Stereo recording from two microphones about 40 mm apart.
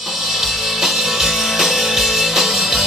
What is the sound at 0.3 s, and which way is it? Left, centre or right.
Music, centre.